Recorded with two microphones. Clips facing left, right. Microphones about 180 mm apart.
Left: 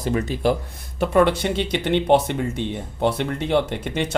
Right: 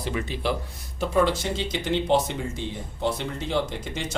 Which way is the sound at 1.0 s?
60° left (ahead or behind).